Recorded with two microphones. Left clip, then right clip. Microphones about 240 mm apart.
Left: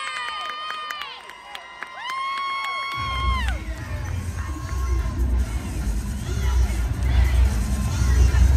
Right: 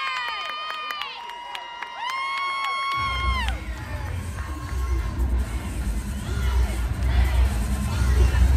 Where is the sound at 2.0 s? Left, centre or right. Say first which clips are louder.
Even; centre.